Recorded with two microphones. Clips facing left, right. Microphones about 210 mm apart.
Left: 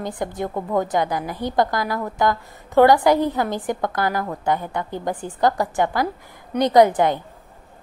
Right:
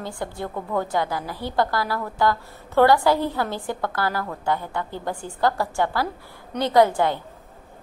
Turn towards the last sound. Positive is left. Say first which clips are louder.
# left 3 dB
turn(degrees=15)  # may be behind; listen again after turning